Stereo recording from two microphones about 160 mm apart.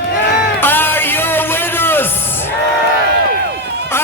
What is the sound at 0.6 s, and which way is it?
Music, 15° left (ahead or behind).